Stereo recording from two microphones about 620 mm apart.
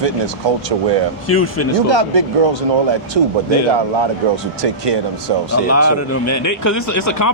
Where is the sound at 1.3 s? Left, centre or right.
Centre.